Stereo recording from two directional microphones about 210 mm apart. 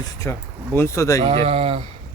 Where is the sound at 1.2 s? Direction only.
25° right (ahead or behind).